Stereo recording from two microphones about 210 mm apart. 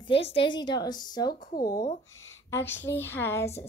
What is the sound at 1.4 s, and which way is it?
Speech, 45° left (ahead or behind).